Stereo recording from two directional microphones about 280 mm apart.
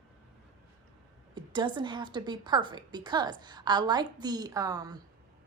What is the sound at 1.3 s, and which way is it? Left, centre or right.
A woman's voice, centre.